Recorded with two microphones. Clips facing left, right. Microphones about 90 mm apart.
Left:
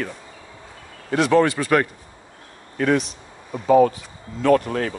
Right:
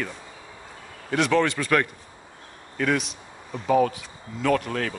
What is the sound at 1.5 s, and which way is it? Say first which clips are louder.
Speech: left 4 dB; 15° left (ahead or behind).